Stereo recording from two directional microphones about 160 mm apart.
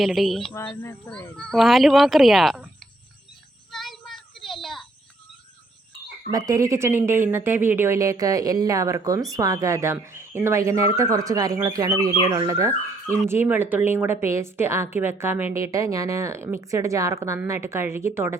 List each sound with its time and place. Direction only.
0.0 s speech: centre (ahead or behind)
0.5 s speech: 15° left (ahead or behind)
1.1 s speech: 5° left (ahead or behind)
3.7 s child singing: centre (ahead or behind)
6.3 s speech: 20° right (ahead or behind)